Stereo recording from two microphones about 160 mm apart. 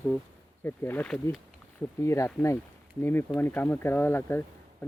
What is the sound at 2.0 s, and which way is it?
Speech, 20° left (ahead or behind).